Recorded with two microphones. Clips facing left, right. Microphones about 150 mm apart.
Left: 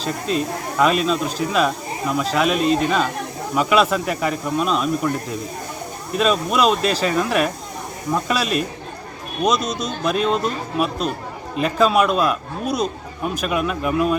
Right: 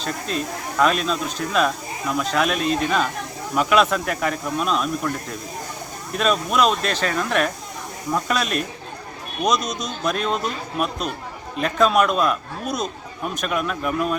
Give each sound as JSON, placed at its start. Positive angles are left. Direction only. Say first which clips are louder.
{"t": 0.0, "sound": "a man's voice", "louder": "left 4 dB", "side_deg": 0}
{"t": 6.1, "sound": "a man's voice", "louder": "left 2 dB", "side_deg": 0}
{"t": 9.6, "sound": "speech", "louder": "left 3 dB", "side_deg": 30}
{"t": 10.0, "sound": "a man's voice", "louder": "left 3 dB", "side_deg": 5}
{"t": 11.5, "sound": "a man's voice", "louder": "left 1 dB", "side_deg": 0}